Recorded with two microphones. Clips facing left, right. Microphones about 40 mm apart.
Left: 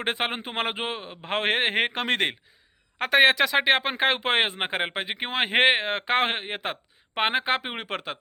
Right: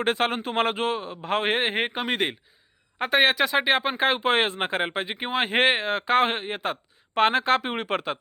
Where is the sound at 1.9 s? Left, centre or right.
Left.